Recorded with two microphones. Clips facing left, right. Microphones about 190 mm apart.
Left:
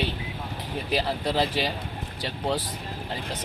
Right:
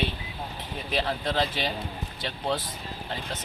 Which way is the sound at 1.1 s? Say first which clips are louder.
Left 1 dB; 10° left (ahead or behind).